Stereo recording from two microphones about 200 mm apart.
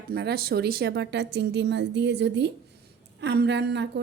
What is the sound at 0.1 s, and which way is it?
A woman's voice, 50° right (ahead or behind).